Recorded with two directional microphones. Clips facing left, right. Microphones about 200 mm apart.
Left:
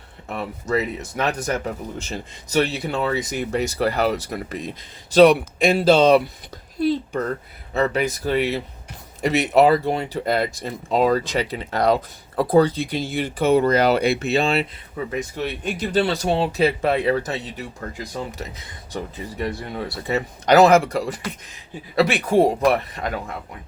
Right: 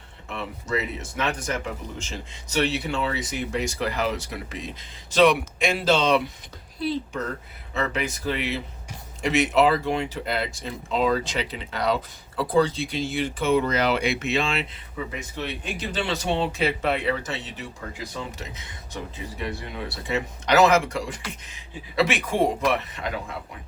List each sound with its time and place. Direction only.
0.3 s speech: 40° left (ahead or behind)
7.7 s speech: 40° left (ahead or behind)